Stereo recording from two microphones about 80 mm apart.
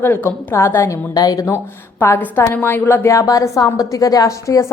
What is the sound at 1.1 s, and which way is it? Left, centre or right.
Speech, left.